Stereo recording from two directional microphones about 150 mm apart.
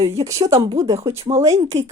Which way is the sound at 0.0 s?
20° right (ahead or behind).